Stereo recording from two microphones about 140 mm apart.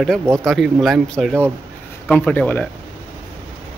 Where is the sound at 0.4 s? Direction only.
Centre (ahead or behind).